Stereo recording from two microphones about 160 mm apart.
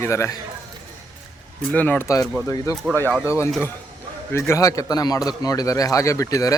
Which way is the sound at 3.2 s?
15° left (ahead or behind).